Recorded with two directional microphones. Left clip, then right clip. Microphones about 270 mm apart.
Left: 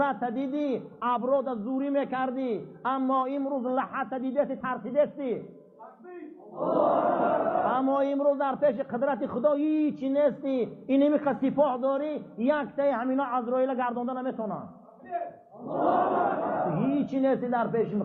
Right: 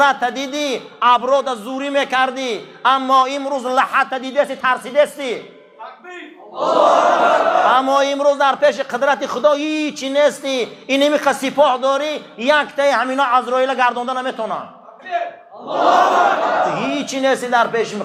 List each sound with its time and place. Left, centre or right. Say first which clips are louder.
0.0 s a man's voice: right 13 dB; centre
6.7 s a man's voice: right 12 dB; centre
15.7 s a man's voice: right 12 dB; centre